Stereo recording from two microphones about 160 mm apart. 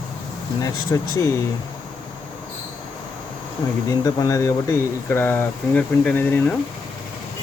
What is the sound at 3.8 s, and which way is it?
Speech, 20° left (ahead or behind).